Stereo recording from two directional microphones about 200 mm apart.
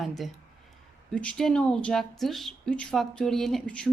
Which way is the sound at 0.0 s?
Centre (ahead or behind).